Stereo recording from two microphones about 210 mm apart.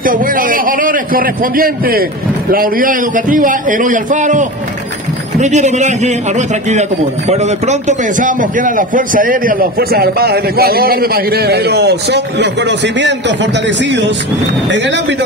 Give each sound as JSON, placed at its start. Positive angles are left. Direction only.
{"t": 0.0, "sound": "a man's voice", "side_deg": -40}